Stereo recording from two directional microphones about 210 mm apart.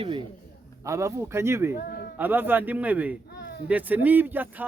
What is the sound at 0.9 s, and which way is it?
Speech, 15° right (ahead or behind).